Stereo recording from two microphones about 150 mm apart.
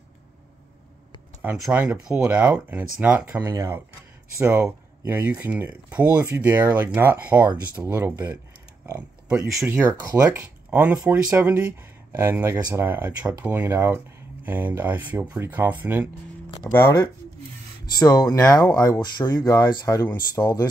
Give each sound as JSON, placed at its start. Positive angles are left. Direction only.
{"t": 1.4, "sound": "speech", "side_deg": -10}
{"t": 8.8, "sound": "a sound", "side_deg": -15}
{"t": 9.7, "sound": "speech", "side_deg": -15}
{"t": 16.7, "sound": "speech", "side_deg": 20}